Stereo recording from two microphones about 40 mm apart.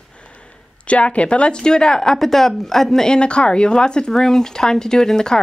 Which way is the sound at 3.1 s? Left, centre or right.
Left.